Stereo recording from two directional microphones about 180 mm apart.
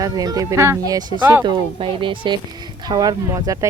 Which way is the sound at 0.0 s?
20° right (ahead or behind).